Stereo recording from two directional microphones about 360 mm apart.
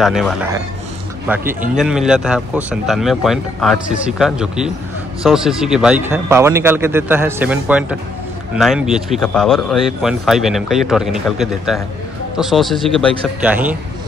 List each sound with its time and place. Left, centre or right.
0.0 s speech: centre